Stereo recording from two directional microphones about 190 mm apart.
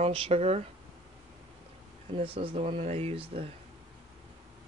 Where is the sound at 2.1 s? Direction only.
30° right (ahead or behind).